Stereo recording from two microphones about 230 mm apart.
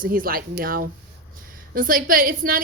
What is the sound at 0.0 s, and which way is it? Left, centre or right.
A woman's voice, right.